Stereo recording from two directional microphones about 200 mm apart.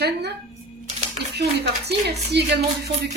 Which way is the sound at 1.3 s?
55° right (ahead or behind).